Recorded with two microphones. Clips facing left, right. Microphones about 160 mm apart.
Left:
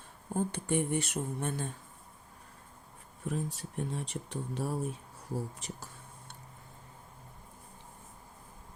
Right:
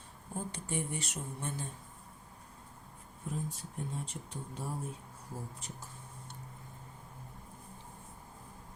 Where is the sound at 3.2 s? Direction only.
75° left (ahead or behind).